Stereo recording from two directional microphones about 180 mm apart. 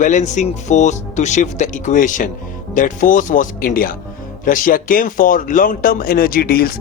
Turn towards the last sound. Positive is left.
turn(degrees=55)  # may be behind; listen again after turning